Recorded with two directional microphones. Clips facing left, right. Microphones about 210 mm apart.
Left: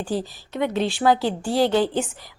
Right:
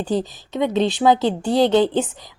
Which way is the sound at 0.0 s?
20° right (ahead or behind).